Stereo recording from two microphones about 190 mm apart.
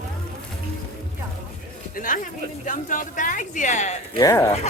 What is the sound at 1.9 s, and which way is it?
A woman's voice, 45° left (ahead or behind).